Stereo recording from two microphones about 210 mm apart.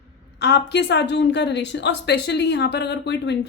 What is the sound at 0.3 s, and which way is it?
A woman's voice, 55° left (ahead or behind).